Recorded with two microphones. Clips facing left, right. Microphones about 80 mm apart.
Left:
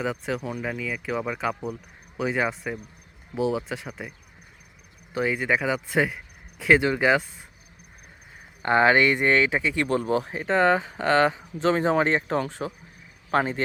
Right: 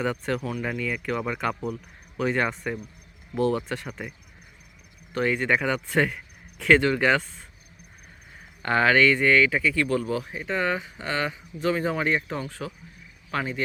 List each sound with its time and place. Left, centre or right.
0.0 s speech: centre
5.1 s speech: centre
8.6 s speech: left
12.5 s speech: left
13.3 s speech: left